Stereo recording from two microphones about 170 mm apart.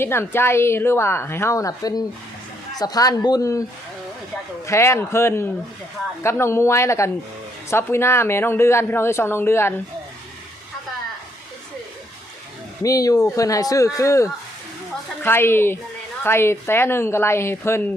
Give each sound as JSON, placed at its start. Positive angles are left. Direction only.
{"t": 0.0, "sound": "a man's voice", "side_deg": 15}
{"t": 4.6, "sound": "speech", "side_deg": 15}
{"t": 12.8, "sound": "a man's voice", "side_deg": 20}